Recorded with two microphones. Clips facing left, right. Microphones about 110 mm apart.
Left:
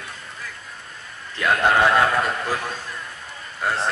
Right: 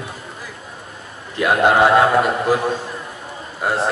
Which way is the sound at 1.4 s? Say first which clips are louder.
Right 4 dB; 15° right (ahead or behind).